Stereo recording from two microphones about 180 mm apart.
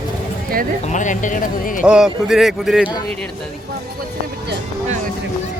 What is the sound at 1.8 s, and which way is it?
A man's voice, 5° right (ahead or behind).